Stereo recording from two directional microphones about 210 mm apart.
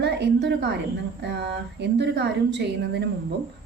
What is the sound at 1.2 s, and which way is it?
A woman's voice, 55° right (ahead or behind).